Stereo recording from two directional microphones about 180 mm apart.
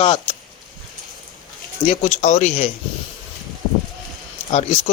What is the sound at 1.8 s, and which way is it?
Speech, 40° left (ahead or behind).